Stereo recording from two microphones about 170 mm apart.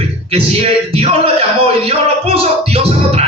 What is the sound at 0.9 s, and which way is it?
Male singing, 35° right (ahead or behind).